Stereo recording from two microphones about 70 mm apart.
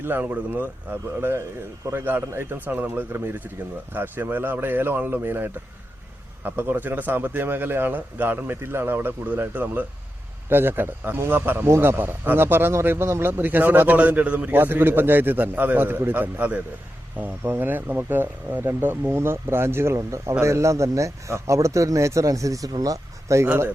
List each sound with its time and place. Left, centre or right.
0.0 s a man's voice: right